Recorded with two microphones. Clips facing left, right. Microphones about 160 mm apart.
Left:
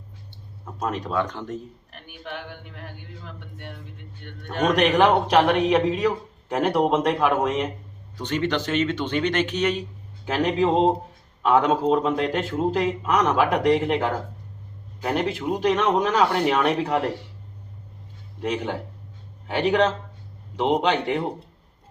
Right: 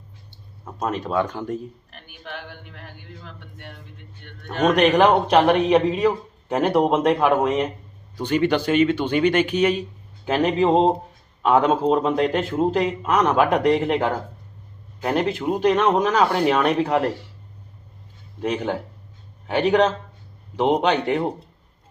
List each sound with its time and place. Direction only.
0.8 s speech: 5° right (ahead or behind)
2.3 s a sound: 55° left (ahead or behind)
4.4 s a man's voice: 5° right (ahead or behind)
20.7 s a man's voice: centre (ahead or behind)